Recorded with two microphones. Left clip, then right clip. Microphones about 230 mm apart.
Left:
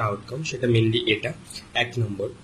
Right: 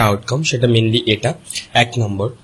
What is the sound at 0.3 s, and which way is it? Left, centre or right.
Speech, right.